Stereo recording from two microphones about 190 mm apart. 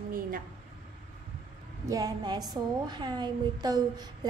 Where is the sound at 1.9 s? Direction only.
20° right (ahead or behind).